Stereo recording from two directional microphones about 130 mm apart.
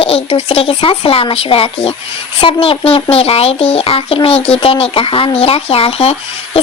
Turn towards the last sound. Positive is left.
turn(degrees=50)  # may be behind; listen again after turning